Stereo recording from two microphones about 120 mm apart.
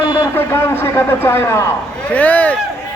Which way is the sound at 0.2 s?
20° left (ahead or behind).